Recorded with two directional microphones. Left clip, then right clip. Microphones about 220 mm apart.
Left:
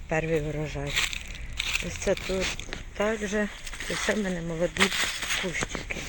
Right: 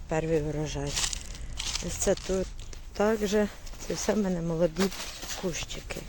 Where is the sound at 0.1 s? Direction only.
10° right (ahead or behind).